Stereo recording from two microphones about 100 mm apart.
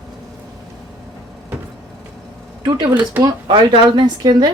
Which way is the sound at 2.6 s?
40° right (ahead or behind).